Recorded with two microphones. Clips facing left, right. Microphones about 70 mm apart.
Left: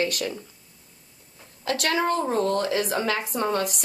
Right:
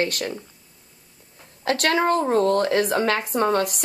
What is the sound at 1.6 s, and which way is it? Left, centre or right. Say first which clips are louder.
A woman's voice: right 4 dB; right.